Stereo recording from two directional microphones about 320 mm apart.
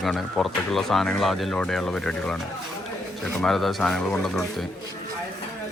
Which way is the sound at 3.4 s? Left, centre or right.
Centre.